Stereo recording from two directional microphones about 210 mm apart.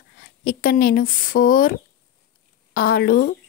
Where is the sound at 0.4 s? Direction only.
45° left (ahead or behind).